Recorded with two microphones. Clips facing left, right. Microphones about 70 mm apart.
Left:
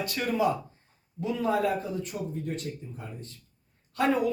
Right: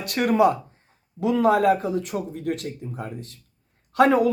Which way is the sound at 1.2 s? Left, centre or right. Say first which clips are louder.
Right 8 dB; right.